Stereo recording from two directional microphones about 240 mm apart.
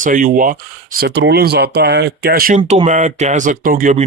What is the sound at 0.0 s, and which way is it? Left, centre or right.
Speech, right.